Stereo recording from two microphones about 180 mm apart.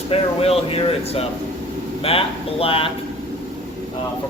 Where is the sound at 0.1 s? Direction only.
35° left (ahead or behind).